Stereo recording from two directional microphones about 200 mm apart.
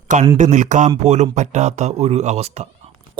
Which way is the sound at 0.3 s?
35° right (ahead or behind).